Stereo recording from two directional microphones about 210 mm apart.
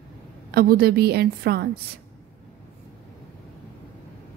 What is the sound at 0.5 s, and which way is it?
A woman's voice, 45° right (ahead or behind).